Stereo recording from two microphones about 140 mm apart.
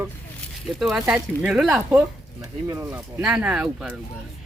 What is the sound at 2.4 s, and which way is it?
Speech, 20° right (ahead or behind).